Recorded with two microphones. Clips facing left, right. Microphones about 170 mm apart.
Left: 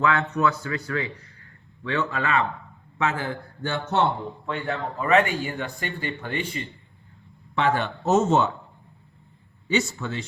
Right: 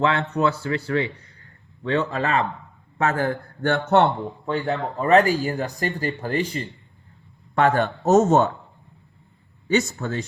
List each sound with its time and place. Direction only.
0.0 s speech: 30° right (ahead or behind)
1.4 s a sound: 35° right (ahead or behind)
3.0 s a man's voice: 45° right (ahead or behind)
4.4 s speech: 35° right (ahead or behind)
7.5 s a man's voice: 45° right (ahead or behind)
9.6 s a man's voice: 45° right (ahead or behind)